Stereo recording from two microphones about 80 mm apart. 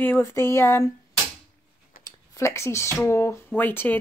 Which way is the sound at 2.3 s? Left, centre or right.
Left.